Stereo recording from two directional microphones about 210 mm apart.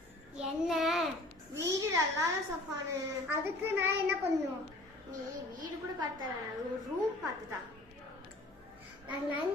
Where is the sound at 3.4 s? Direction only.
10° right (ahead or behind).